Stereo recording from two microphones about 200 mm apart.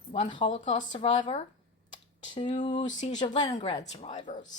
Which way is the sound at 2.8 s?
35° left (ahead or behind).